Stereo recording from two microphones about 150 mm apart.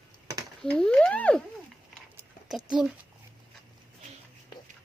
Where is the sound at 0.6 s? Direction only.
5° left (ahead or behind).